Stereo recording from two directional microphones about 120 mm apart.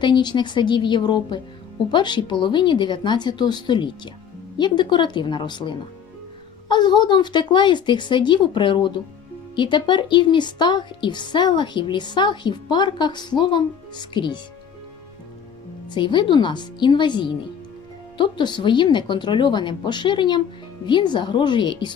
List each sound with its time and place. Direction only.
0.0 s a woman's voice: 40° left (ahead or behind)
15.9 s a woman's voice: 40° left (ahead or behind)